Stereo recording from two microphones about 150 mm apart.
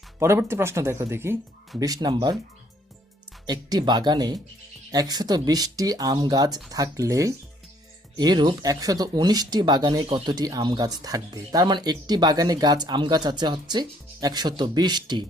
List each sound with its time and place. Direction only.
0.2 s speech: 20° right (ahead or behind)
3.4 s speech: 25° right (ahead or behind)